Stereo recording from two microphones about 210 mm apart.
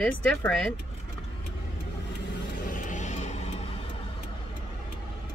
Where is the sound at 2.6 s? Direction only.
40° left (ahead or behind).